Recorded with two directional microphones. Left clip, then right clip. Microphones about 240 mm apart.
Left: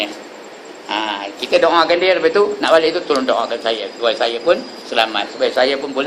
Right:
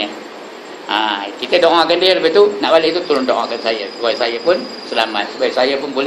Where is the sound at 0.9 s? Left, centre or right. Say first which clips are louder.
Right 4 dB; centre.